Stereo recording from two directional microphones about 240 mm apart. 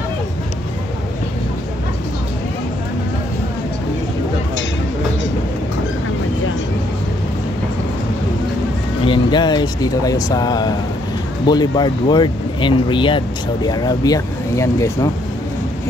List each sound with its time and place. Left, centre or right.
9.0 s speech: centre